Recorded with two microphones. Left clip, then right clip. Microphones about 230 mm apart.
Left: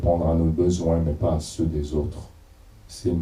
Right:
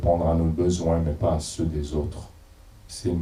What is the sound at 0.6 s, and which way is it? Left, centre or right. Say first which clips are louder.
Speech: left 2 dB; centre.